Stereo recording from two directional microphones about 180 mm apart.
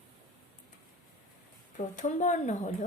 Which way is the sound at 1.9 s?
45° left (ahead or behind).